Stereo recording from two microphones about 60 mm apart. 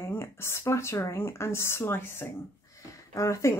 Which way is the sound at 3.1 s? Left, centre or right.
Left.